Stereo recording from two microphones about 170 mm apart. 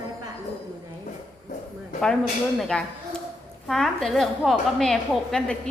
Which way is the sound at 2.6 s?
5° left (ahead or behind).